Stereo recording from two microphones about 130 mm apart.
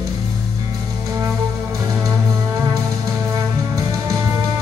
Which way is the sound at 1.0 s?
25° right (ahead or behind).